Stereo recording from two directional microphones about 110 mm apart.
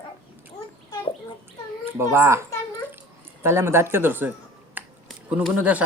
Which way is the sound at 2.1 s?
25° right (ahead or behind).